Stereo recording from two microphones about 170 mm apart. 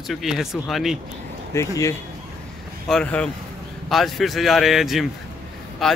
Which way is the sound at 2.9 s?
5° left (ahead or behind).